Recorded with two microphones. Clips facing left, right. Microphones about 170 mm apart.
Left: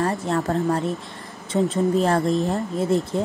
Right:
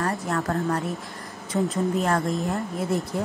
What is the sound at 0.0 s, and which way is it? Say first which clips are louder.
Speech: left 4 dB; 25° left (ahead or behind).